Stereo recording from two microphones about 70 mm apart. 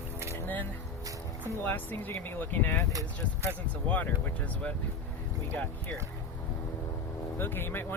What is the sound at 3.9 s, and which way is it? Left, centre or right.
Speech, left.